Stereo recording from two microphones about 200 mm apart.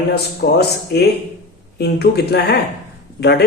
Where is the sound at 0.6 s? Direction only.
55° left (ahead or behind).